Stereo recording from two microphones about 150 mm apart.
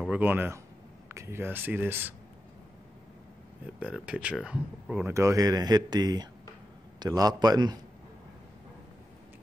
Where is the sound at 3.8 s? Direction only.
5° right (ahead or behind); by 7.8 s 25° right (ahead or behind).